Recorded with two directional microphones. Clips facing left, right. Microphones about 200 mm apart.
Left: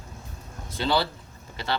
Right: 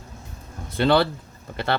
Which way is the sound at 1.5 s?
60° right (ahead or behind).